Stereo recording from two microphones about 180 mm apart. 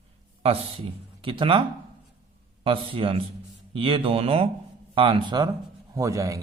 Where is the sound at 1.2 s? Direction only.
30° right (ahead or behind).